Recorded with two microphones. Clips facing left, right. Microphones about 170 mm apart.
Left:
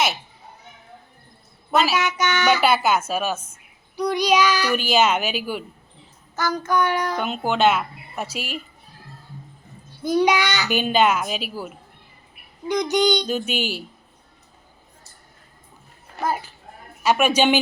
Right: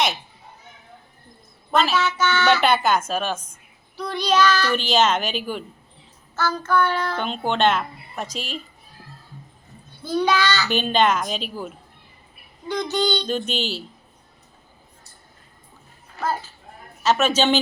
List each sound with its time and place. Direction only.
1.7 s a child's voice: 10° left (ahead or behind)
2.6 s a child's voice: 5° left (ahead or behind)
10.0 s a child's voice: 15° left (ahead or behind)
17.0 s a child's voice: 10° left (ahead or behind)